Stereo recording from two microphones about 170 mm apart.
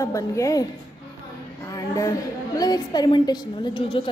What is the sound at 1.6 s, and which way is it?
A woman's voice, 20° left (ahead or behind).